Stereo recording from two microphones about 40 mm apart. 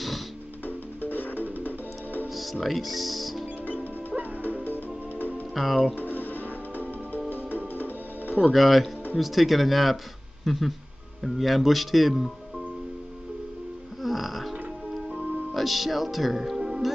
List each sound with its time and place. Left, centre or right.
0.7 s music: left
2.3 s music: centre
4.6 s music: left
5.5 s speech: centre
5.9 s music: left
8.5 s speech: centre
14.0 s music: centre
15.5 s speech: centre